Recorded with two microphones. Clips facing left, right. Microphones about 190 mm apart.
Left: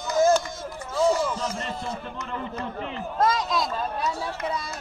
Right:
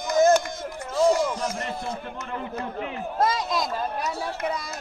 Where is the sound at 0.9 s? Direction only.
15° right (ahead or behind).